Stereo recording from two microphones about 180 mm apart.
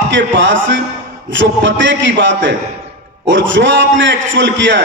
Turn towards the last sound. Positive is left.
turn(degrees=-90)